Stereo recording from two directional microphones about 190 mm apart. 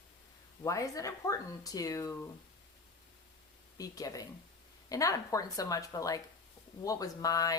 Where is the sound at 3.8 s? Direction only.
20° left (ahead or behind).